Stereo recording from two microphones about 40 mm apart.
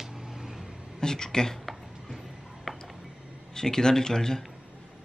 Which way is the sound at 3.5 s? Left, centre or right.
Centre.